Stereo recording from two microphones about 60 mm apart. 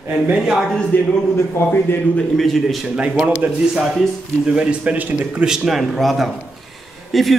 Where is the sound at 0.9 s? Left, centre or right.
Left.